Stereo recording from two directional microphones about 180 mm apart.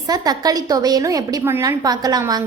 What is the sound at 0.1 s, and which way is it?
A woman's voice, 20° right (ahead or behind).